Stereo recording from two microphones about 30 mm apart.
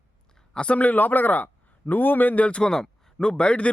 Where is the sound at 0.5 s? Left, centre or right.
Left.